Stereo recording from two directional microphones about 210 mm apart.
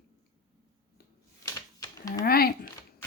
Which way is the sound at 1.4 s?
15° left (ahead or behind).